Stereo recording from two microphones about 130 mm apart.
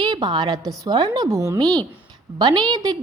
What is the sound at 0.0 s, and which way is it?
A woman's voice, 35° right (ahead or behind).